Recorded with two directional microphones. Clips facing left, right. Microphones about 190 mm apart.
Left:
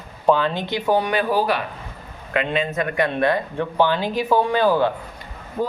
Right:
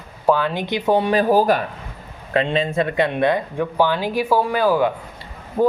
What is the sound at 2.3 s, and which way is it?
Speech, 30° right (ahead or behind).